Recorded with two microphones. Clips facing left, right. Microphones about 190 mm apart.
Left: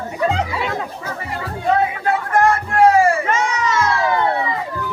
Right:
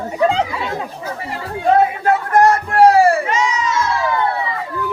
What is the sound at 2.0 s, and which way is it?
Music, 40° right (ahead or behind).